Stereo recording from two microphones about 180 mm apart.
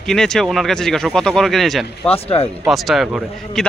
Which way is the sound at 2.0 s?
35° left (ahead or behind).